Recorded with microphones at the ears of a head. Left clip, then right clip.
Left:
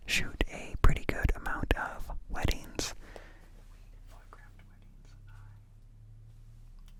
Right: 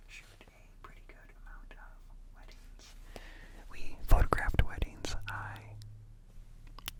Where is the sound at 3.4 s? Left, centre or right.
Right.